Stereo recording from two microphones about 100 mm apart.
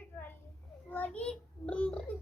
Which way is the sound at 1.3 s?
10° left (ahead or behind).